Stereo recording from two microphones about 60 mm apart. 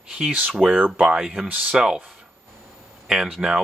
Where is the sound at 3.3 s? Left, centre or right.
Centre.